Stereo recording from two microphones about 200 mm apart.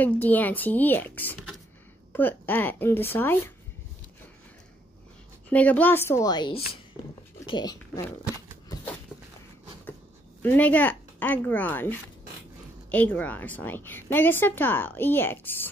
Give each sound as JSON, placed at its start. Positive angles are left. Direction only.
{"t": 0.0, "sound": "a woman's voice", "side_deg": 10}
{"t": 5.5, "sound": "a woman's voice", "side_deg": 5}
{"t": 10.4, "sound": "a woman's voice", "side_deg": 10}